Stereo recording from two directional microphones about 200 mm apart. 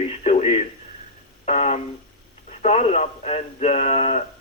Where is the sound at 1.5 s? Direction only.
35° left (ahead or behind).